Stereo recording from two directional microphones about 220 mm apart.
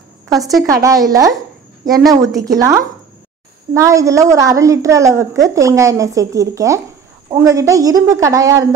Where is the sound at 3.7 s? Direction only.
15° right (ahead or behind).